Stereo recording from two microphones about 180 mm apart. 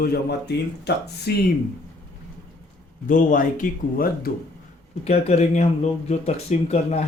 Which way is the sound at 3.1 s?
50° left (ahead or behind).